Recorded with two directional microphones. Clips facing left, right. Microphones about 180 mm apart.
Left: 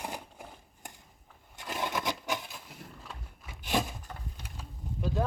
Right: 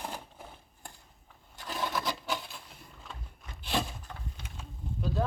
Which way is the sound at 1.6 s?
20° left (ahead or behind).